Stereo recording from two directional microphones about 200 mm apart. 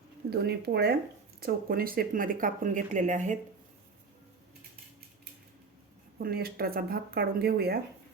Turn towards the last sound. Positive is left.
turn(degrees=-50)  # may be behind; listen again after turning